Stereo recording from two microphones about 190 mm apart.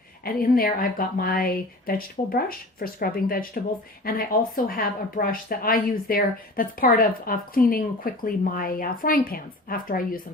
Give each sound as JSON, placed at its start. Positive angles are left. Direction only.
{"t": 0.3, "sound": "a woman's voice", "side_deg": 50}